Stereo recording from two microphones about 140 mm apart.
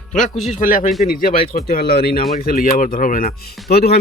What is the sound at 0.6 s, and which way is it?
Speech, 80° left.